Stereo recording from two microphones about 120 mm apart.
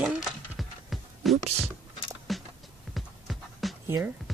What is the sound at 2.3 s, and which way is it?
Music, centre (ahead or behind).